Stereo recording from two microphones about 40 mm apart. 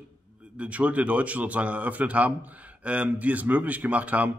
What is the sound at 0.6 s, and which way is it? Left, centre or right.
A man's voice, right.